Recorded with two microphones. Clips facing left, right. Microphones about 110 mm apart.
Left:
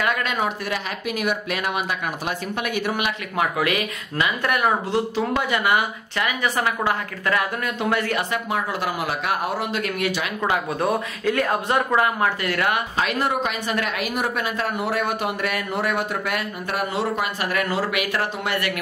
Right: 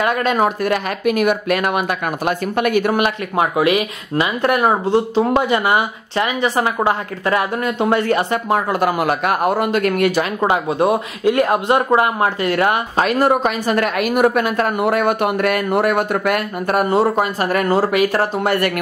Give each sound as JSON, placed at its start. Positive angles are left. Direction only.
{"t": 0.0, "sound": "speech", "side_deg": -35}
{"t": 0.4, "sound": "speech", "side_deg": -55}
{"t": 3.3, "sound": "speech", "side_deg": -25}
{"t": 8.5, "sound": "speech", "side_deg": -50}
{"t": 10.4, "sound": "speech", "side_deg": -25}
{"t": 11.7, "sound": "speech", "side_deg": -30}
{"t": 12.9, "sound": "speech", "side_deg": -45}